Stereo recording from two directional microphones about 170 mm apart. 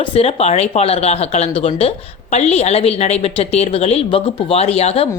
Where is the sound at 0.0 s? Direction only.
35° left (ahead or behind).